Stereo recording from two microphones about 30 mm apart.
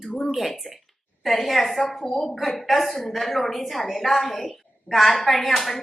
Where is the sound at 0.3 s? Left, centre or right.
Centre.